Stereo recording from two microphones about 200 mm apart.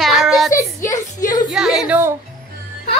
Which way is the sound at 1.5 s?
Centre (ahead or behind).